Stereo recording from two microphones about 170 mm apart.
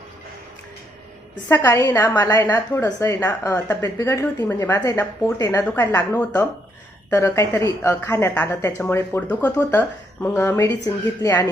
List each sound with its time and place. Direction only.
1.5 s a woman's voice: 15° left (ahead or behind)